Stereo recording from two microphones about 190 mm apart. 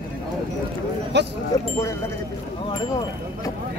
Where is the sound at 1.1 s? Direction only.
65° right (ahead or behind).